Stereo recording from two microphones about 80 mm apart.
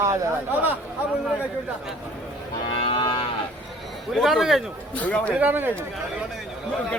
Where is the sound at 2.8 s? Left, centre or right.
Left.